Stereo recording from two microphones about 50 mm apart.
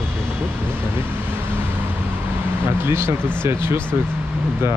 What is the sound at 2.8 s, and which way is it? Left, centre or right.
Speech, right.